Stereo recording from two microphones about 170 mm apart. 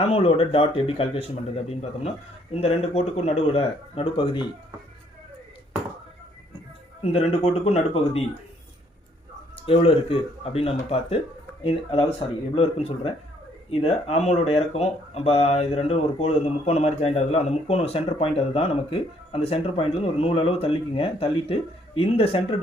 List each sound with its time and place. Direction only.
0.0 s speech: 35° left (ahead or behind)
7.0 s speech: 35° left (ahead or behind)
9.6 s speech: 35° left (ahead or behind)